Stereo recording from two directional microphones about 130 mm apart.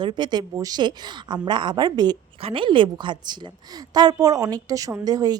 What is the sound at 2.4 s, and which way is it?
A woman's voice, 45° right (ahead or behind).